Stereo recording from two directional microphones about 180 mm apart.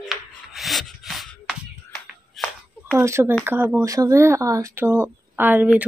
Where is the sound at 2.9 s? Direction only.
15° right (ahead or behind).